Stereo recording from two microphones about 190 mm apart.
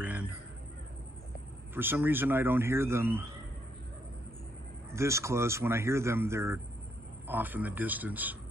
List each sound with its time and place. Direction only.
0.0 s a sound: 10° right (ahead or behind)
1.7 s speech: 10° right (ahead or behind)
4.9 s speech: 15° right (ahead or behind)